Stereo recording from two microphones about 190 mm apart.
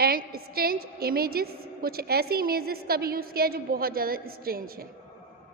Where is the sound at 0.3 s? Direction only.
50° right (ahead or behind).